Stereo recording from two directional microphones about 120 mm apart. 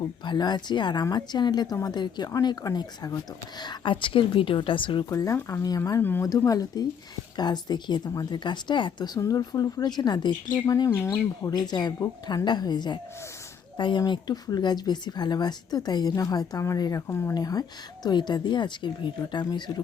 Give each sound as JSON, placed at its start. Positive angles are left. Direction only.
{"t": 0.3, "sound": "a woman's voice", "side_deg": 35}
{"t": 5.0, "sound": "speech", "side_deg": 30}
{"t": 6.0, "sound": "speech", "side_deg": 15}
{"t": 6.2, "sound": "speech", "side_deg": 30}
{"t": 11.5, "sound": "speech", "side_deg": 35}
{"t": 17.3, "sound": "speech", "side_deg": 35}